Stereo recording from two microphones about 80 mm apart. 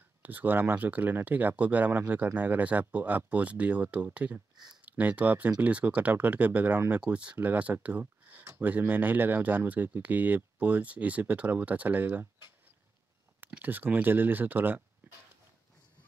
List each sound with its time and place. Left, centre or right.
0.2 s speech: right
13.6 s speech: right